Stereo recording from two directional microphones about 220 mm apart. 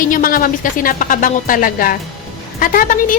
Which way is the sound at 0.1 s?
40° left (ahead or behind).